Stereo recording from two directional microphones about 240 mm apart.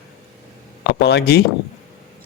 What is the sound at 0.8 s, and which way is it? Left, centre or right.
Speech, left.